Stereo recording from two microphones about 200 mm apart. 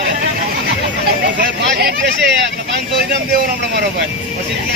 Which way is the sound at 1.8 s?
55° right (ahead or behind).